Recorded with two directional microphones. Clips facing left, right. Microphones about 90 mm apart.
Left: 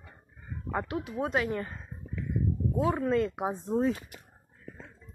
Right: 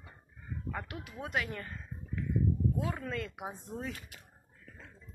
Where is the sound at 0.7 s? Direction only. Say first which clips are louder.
Left 13 dB; 25° left (ahead or behind).